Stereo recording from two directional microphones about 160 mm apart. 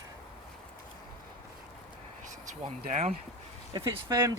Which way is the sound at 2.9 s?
45° right (ahead or behind).